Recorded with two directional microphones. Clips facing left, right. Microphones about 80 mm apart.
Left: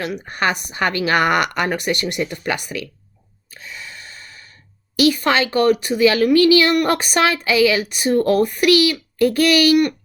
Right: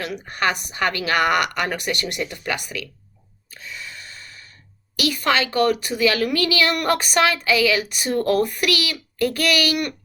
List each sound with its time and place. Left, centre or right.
0.3 s speech: left
3.6 s a sound: left
4.9 s speech: left